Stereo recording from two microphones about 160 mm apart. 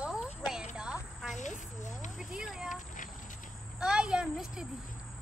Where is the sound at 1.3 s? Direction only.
50° left (ahead or behind).